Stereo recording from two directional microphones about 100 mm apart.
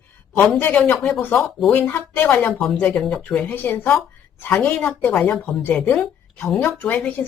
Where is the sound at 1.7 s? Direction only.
20° left (ahead or behind).